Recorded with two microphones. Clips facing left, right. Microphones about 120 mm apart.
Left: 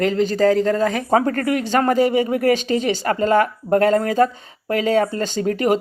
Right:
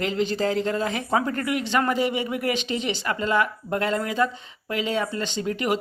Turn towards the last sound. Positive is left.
turn(degrees=40)  # may be behind; listen again after turning